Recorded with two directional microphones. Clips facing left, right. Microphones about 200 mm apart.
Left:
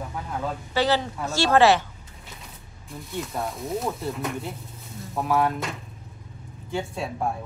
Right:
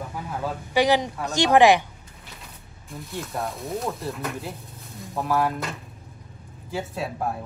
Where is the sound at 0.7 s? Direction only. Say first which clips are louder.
Right 3 dB; 15° right (ahead or behind).